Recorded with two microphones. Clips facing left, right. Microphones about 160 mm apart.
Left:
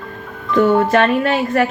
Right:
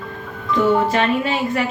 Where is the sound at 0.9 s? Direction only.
55° left (ahead or behind).